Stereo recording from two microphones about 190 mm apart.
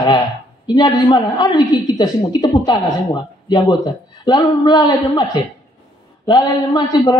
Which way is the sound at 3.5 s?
20° left (ahead or behind).